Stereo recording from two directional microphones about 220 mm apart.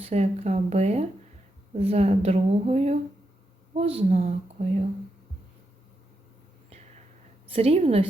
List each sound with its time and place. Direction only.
0.0 s a woman's voice: 30° right (ahead or behind)
7.5 s a woman's voice: 25° right (ahead or behind)